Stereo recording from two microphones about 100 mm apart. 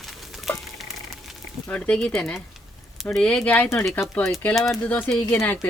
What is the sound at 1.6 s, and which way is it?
Speech, 10° left (ahead or behind).